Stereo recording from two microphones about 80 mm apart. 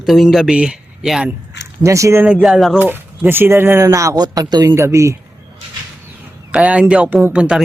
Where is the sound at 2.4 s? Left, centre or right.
Centre.